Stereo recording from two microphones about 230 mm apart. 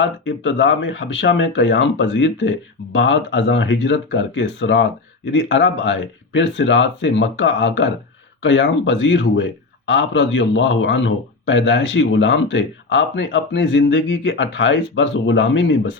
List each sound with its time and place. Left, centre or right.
0.0 s speech: left